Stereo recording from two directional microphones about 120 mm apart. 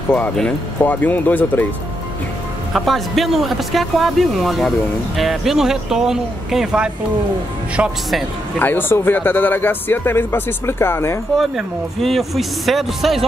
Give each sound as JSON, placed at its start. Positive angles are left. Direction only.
{"t": 0.1, "sound": "speech", "side_deg": 10}
{"t": 2.7, "sound": "speech", "side_deg": 0}
{"t": 8.5, "sound": "speech", "side_deg": 15}
{"t": 11.3, "sound": "speech", "side_deg": 0}